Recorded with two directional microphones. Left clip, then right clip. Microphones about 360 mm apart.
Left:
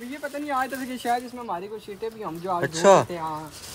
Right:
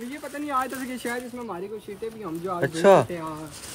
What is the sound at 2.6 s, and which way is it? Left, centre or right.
Speech, centre.